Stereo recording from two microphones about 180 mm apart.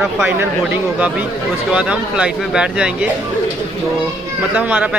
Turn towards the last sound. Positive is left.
turn(degrees=-10)  # may be behind; listen again after turning